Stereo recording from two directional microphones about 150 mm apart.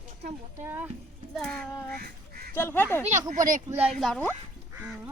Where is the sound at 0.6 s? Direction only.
15° right (ahead or behind).